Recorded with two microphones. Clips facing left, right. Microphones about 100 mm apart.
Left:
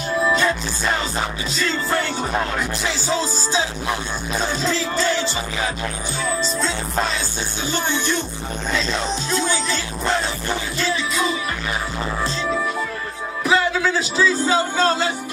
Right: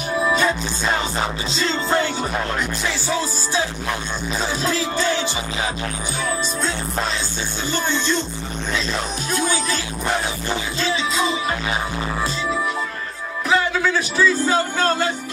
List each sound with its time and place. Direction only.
0.2 s music: 15° right (ahead or behind)
3.1 s music: 25° left (ahead or behind)
4.9 s music: 15° right (ahead or behind)
7.7 s speech: 15° left (ahead or behind)
9.3 s music: 15° right (ahead or behind)
13.5 s speech: 15° left (ahead or behind)